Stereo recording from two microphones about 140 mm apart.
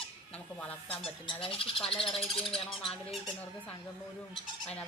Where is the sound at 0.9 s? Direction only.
40° left (ahead or behind).